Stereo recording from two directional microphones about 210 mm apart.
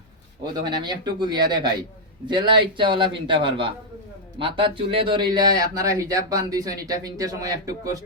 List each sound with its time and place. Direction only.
0.7 s speech: 20° right (ahead or behind)